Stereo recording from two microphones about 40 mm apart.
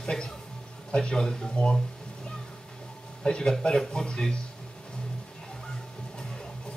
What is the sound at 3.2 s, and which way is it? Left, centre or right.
Speech, centre.